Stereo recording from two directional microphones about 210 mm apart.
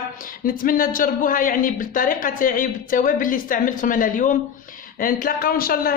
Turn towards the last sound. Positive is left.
turn(degrees=45)  # may be behind; listen again after turning